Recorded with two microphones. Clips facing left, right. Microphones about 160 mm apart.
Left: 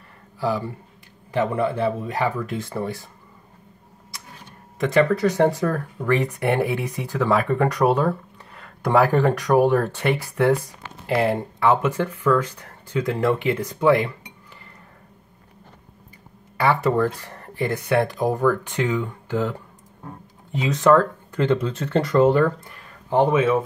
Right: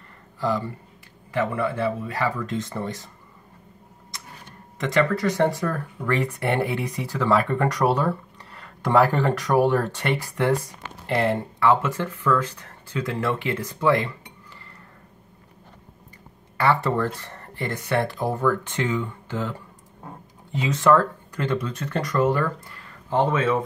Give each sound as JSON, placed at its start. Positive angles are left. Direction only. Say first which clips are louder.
{"t": 0.4, "sound": "speech", "louder": "left 1 dB", "side_deg": 10}
{"t": 1.3, "sound": "speech", "louder": "left 3 dB", "side_deg": 25}
{"t": 5.1, "sound": "speech", "louder": "left 3 dB", "side_deg": 15}
{"t": 16.5, "sound": "speech", "louder": "left 2 dB", "side_deg": 15}
{"t": 20.5, "sound": "speech", "louder": "left 2 dB", "side_deg": 20}